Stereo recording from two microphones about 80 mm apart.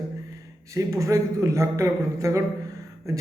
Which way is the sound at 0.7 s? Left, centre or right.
Right.